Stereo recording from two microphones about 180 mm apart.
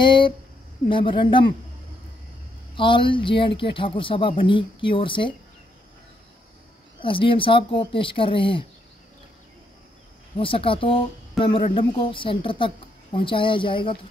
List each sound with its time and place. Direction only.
0.0 s speech: 25° left (ahead or behind)
2.7 s speech: 25° left (ahead or behind)
7.0 s speech: 30° left (ahead or behind)
10.3 s speech: 30° left (ahead or behind)